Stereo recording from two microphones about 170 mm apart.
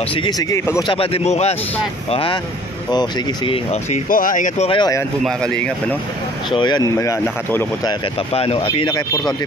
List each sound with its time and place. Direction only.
0.1 s speech: 25° left (ahead or behind)
0.9 s speech: 35° left (ahead or behind)
4.1 s speech: 55° left (ahead or behind)
4.6 s speech: 25° left (ahead or behind)
6.5 s speech: 25° left (ahead or behind)
8.3 s speech: 35° left (ahead or behind)